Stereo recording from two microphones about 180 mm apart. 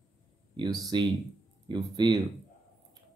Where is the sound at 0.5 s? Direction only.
25° right (ahead or behind).